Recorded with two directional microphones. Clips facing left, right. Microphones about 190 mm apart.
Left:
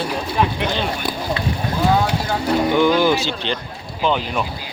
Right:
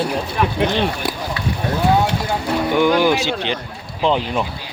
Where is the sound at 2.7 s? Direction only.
15° right (ahead or behind).